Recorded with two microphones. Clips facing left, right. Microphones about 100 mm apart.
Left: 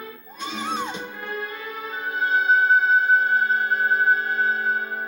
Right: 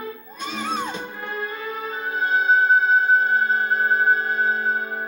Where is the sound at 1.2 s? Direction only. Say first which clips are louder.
Right 3 dB; 25° right (ahead or behind).